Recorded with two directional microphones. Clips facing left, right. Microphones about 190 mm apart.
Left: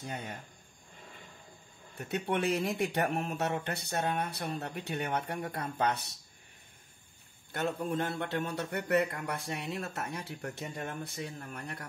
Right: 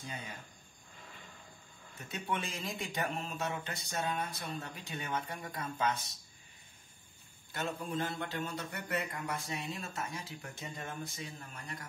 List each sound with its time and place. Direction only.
0.0 s a man's voice: 60° left (ahead or behind)
2.0 s a man's voice: 65° left (ahead or behind)
7.5 s a man's voice: 55° left (ahead or behind)